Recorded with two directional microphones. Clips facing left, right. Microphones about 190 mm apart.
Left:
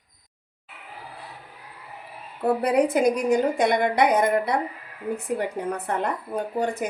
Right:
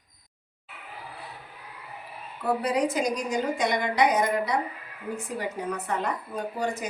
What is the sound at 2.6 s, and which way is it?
Speech, 60° left (ahead or behind).